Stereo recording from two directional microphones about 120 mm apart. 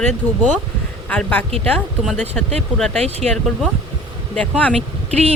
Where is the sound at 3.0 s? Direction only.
60° right (ahead or behind).